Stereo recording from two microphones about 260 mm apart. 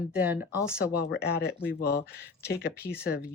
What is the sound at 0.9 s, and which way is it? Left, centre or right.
Speech, left.